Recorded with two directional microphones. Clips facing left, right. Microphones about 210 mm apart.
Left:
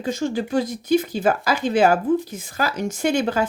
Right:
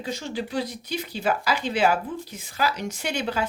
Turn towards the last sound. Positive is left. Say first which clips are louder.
# left 7 dB
turn(degrees=45)  # may be behind; listen again after turning